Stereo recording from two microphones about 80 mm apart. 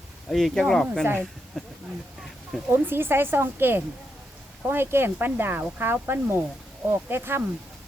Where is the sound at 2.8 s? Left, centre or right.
Right.